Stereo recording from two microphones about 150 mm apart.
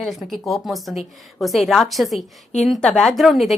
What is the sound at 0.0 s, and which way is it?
A woman's voice, centre (ahead or behind).